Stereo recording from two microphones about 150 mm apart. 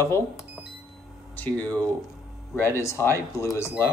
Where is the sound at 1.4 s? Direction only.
10° left (ahead or behind).